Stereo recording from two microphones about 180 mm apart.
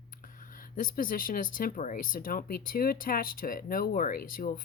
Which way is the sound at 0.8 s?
50° left (ahead or behind).